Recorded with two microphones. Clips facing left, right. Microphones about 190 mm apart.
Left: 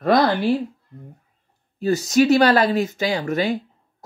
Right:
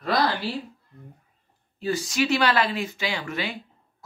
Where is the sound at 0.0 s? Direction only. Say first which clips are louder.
Left 7 dB; 55° left (ahead or behind).